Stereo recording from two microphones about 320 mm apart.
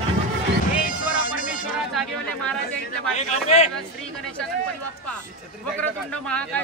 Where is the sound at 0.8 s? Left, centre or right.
Left.